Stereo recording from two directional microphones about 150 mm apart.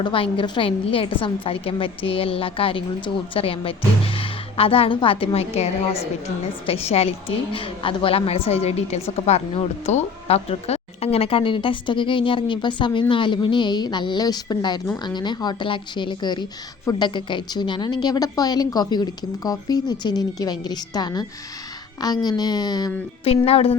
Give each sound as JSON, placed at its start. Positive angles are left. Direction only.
{"t": 0.0, "sound": "a woman's voice", "side_deg": 35}
{"t": 23.5, "sound": "a woman's voice", "side_deg": 40}